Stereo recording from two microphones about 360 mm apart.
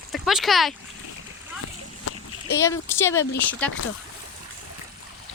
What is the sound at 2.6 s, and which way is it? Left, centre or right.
Speech, centre.